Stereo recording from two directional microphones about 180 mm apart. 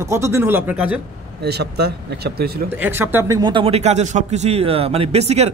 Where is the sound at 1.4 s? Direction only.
65° right (ahead or behind).